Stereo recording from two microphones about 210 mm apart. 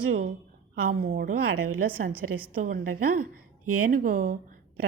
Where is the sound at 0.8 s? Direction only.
45° right (ahead or behind).